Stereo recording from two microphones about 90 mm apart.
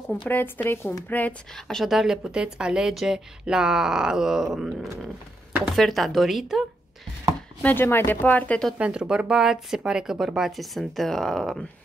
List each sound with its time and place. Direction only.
0.3 s speech: 20° left (ahead or behind)
1.5 s a woman's voice: 5° left (ahead or behind)
7.6 s speech: 25° left (ahead or behind)
8.7 s a woman's voice: 10° right (ahead or behind); by 11.6 s 5° left (ahead or behind)